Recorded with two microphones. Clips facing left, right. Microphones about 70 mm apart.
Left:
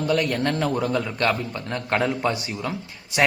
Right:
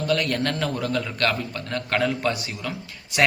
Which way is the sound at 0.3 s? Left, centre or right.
Centre.